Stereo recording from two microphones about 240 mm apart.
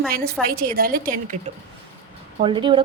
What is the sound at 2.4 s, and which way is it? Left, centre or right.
Speech, centre.